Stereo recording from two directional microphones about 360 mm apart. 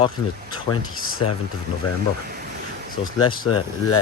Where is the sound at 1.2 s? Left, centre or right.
Left.